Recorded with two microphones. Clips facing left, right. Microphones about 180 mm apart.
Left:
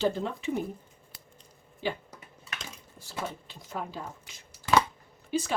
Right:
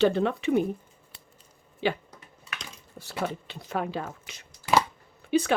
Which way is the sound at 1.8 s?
75° right (ahead or behind).